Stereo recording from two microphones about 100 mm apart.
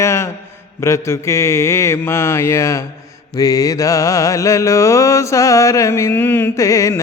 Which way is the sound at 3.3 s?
35° left (ahead or behind).